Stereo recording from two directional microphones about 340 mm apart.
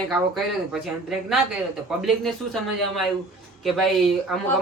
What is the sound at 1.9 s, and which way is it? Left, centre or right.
Speech, centre.